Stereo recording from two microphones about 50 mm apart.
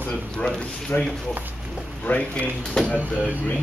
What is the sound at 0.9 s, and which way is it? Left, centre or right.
Speech, left.